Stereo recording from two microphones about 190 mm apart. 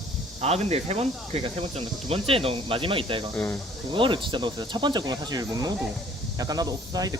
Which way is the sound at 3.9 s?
25° right (ahead or behind).